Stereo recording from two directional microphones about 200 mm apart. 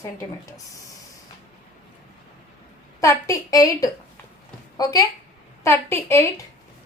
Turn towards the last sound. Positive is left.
turn(degrees=15)  # may be behind; listen again after turning